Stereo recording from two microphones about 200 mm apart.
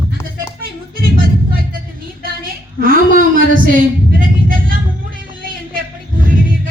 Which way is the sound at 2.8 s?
45° right (ahead or behind).